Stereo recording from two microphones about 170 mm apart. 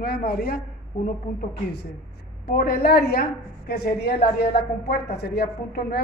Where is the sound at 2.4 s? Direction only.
70° left (ahead or behind).